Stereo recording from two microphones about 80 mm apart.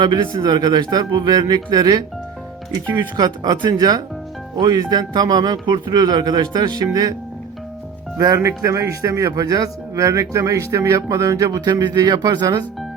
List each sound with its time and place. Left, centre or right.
0.0 s speech: right
4.5 s speech: right
4.8 s speech: right
8.4 s speech: right